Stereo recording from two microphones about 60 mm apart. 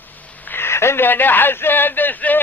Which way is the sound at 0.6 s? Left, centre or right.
Left.